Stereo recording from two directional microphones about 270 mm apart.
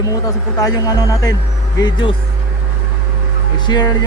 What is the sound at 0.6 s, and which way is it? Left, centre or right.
Speech, centre.